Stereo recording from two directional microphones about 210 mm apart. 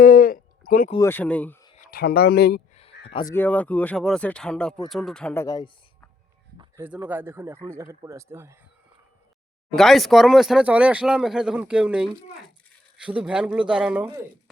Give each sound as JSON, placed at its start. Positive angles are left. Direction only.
{"t": 0.0, "sound": "a sound", "side_deg": 40}
{"t": 0.9, "sound": "speech", "side_deg": 10}
{"t": 1.8, "sound": "speech", "side_deg": 45}
{"t": 3.1, "sound": "speech", "side_deg": 20}
{"t": 3.3, "sound": "speech", "side_deg": 10}
{"t": 6.6, "sound": "a sound", "side_deg": -10}
{"t": 7.1, "sound": "speech", "side_deg": -10}
{"t": 9.7, "sound": "speech", "side_deg": 0}